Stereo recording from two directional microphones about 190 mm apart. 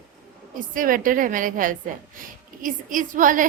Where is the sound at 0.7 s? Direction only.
45° right (ahead or behind).